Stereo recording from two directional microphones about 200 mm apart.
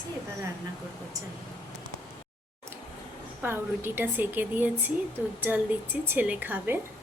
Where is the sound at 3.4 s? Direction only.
10° right (ahead or behind).